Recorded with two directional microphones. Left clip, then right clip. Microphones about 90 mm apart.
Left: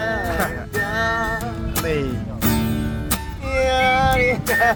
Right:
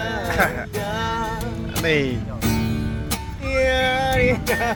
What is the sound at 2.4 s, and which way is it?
Music, 45° left (ahead or behind).